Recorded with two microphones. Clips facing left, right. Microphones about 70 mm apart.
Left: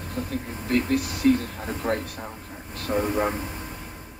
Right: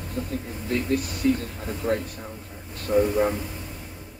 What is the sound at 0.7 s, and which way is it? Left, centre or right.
Speech, left.